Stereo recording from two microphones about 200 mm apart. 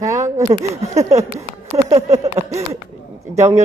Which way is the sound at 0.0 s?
15° right (ahead or behind).